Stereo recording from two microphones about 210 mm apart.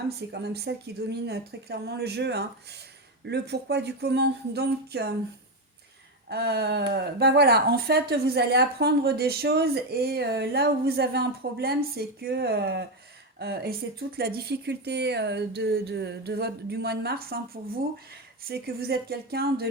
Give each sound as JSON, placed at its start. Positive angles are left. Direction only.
{"t": 0.2, "sound": "speech", "side_deg": -50}
{"t": 6.2, "sound": "speech", "side_deg": -50}